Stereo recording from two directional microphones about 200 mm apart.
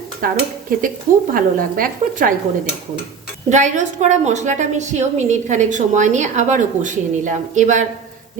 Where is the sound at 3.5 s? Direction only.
35° right (ahead or behind).